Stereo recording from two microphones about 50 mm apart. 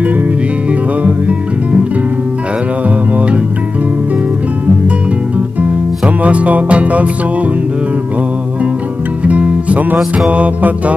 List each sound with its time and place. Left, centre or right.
5.6 s music: right
9.2 s music: right